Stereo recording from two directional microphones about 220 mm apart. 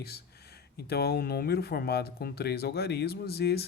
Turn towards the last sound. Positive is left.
turn(degrees=45)  # may be behind; listen again after turning